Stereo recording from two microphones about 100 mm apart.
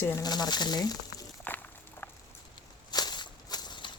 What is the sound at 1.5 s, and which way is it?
Walk, 20° left (ahead or behind).